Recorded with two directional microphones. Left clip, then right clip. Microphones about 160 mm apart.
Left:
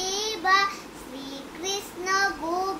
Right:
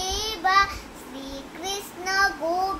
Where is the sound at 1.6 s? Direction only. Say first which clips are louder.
Even; 10° right (ahead or behind).